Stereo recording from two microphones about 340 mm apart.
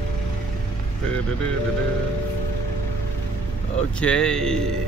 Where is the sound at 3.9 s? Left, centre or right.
Centre.